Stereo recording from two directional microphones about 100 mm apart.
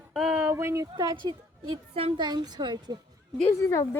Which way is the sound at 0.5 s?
30° right (ahead or behind).